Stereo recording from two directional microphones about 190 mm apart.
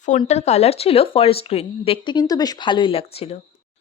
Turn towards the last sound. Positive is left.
turn(degrees=30)  # may be behind; listen again after turning